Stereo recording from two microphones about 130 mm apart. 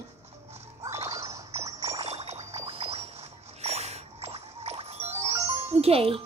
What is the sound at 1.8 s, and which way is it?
Music, 50° right (ahead or behind).